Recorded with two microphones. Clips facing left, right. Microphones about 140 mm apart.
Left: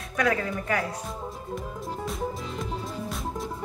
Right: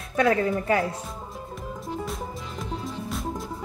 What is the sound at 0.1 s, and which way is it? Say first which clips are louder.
Speech: right 5 dB; 30° right (ahead or behind).